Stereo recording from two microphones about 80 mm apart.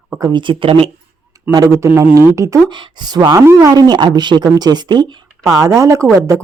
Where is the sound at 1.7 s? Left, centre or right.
Right.